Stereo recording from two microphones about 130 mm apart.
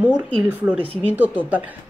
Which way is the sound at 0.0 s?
10° right (ahead or behind).